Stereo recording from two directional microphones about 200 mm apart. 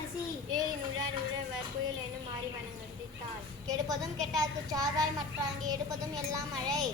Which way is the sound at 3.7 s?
20° right (ahead or behind).